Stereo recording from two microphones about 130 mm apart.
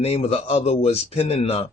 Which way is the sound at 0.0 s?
50° left (ahead or behind).